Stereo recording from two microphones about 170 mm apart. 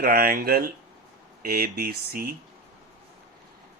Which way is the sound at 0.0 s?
60° right (ahead or behind).